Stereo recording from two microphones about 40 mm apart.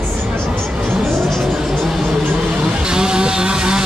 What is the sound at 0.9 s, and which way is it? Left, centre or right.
Vehicle, centre.